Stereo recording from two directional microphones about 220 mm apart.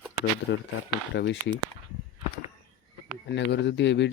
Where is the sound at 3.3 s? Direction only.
50° left (ahead or behind).